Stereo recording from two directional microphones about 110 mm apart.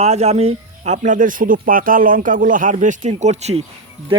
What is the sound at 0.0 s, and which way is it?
Speech, 80° right.